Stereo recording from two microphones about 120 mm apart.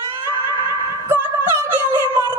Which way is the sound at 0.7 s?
20° right (ahead or behind).